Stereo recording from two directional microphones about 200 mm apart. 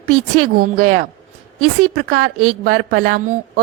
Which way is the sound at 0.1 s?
90° right.